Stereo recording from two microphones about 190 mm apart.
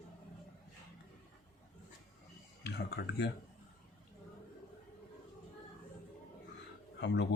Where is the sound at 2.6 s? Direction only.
60° left (ahead or behind).